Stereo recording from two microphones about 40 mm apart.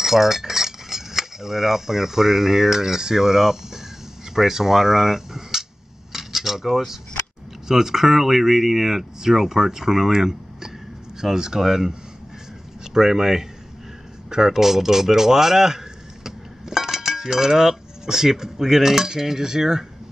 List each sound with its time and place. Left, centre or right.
0.0 s cutlery: centre
4.4 s speech: centre
6.1 s cutlery: centre
7.6 s speech: centre
12.9 s speech: centre